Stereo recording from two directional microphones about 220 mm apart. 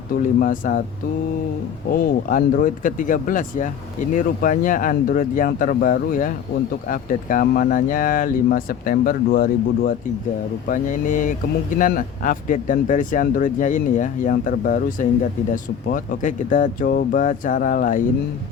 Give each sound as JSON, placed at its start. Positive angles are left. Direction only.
{"t": 0.3, "sound": "speech", "side_deg": 35}
{"t": 1.9, "sound": "speech", "side_deg": 40}